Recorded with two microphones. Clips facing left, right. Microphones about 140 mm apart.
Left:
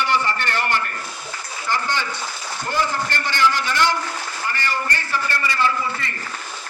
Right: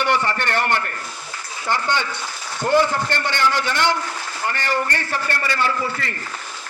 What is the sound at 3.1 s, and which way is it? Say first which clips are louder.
A man's voice: even; 60° right (ahead or behind).